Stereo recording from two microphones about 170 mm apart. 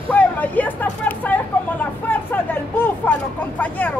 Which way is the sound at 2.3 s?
10° left (ahead or behind).